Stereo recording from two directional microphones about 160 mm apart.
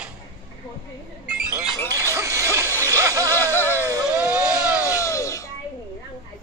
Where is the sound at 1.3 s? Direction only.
5° right (ahead or behind).